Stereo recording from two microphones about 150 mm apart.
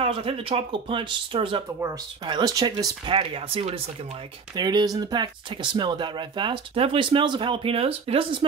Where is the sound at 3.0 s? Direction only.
35° right (ahead or behind).